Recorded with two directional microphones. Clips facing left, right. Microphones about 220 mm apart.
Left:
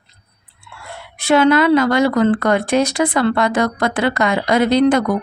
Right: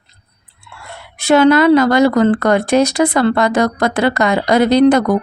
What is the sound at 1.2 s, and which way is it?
Speech, 40° right (ahead or behind).